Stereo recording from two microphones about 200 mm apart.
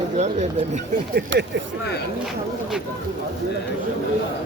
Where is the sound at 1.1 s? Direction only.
65° right (ahead or behind).